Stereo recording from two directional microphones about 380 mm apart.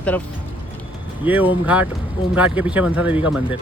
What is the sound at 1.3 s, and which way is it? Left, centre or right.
Speech, centre.